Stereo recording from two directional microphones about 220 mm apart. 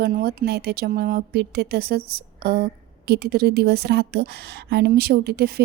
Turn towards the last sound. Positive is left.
turn(degrees=-45)  # may be behind; listen again after turning